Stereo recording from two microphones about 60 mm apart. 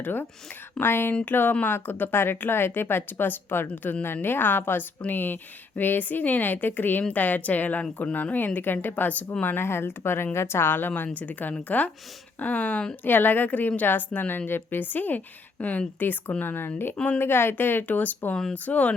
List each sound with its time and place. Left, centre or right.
0.0 s a woman's voice: left; by 13.0 s centre
13.1 s a woman's voice: left